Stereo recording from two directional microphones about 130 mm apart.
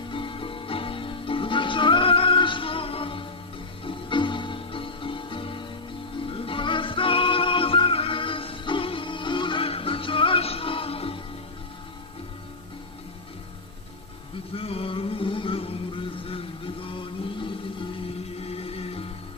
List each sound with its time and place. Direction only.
0.1 s music: 40° left (ahead or behind)
14.5 s music: 45° left (ahead or behind)